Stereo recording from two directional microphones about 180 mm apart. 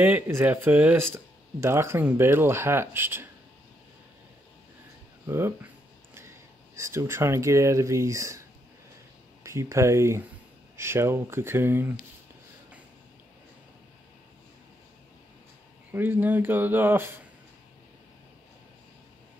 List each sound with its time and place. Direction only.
0.0 s speech: 10° right (ahead or behind)
5.2 s speech: 15° right (ahead or behind)
9.4 s speech: 15° right (ahead or behind)
15.9 s speech: 10° right (ahead or behind)